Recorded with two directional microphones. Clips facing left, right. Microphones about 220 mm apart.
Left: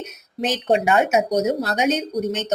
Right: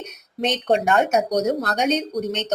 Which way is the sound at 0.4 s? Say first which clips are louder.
Left 1 dB; 5° left (ahead or behind).